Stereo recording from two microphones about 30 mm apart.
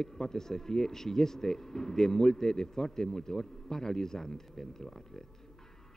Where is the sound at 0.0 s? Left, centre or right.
Centre.